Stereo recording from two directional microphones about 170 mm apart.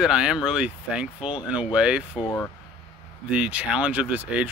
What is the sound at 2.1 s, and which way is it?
Speech, 25° left (ahead or behind).